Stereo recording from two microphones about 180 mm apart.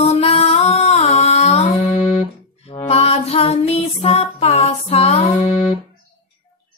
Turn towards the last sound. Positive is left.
turn(degrees=35)  # may be behind; listen again after turning